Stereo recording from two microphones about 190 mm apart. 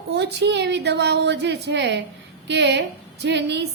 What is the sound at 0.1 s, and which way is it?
A woman's voice, 60° right (ahead or behind).